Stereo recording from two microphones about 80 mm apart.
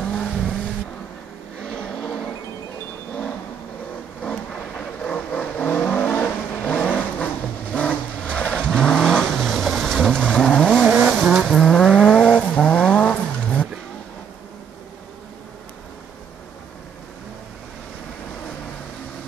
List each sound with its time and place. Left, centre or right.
0.0 s vehicle: centre
4.2 s vehicle: centre
11.1 s vehicle: centre
11.4 s vehicle: centre